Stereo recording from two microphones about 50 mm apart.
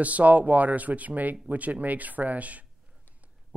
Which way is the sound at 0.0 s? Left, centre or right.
Right.